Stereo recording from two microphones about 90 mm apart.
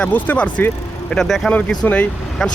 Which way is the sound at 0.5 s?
15° left (ahead or behind).